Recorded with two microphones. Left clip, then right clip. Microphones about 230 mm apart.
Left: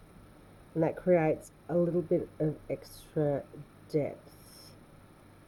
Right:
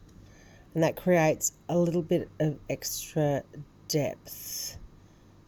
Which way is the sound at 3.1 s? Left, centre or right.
Right.